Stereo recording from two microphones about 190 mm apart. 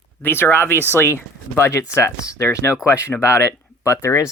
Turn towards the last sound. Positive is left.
turn(degrees=15)  # may be behind; listen again after turning